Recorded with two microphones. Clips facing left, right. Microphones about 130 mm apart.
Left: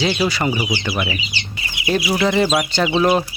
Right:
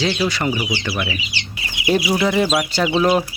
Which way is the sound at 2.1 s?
Centre (ahead or behind).